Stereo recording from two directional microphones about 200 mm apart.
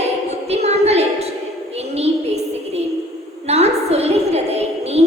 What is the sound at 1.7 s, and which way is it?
Music, 30° right (ahead or behind).